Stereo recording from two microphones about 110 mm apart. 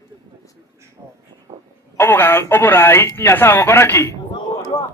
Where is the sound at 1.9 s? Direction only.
20° left (ahead or behind).